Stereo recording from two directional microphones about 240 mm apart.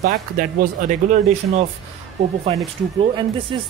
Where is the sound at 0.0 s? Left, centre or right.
Right.